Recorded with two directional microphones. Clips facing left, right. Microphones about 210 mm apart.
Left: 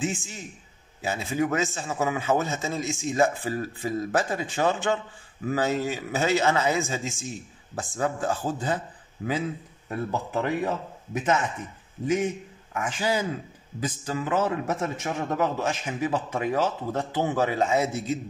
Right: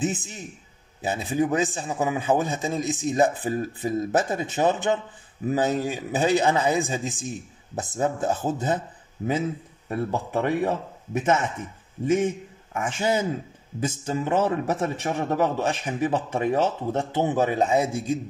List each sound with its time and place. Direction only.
0.0 s a man's voice: 20° right (ahead or behind)
12.7 s a man's voice: 25° right (ahead or behind)